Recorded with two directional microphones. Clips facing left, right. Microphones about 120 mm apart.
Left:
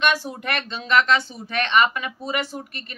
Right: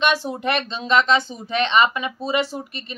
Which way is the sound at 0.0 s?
25° right (ahead or behind).